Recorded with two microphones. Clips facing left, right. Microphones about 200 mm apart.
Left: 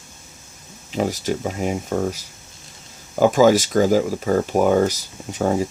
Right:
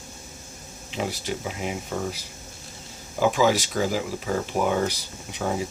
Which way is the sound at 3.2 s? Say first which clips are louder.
Left 7 dB; 45° left (ahead or behind).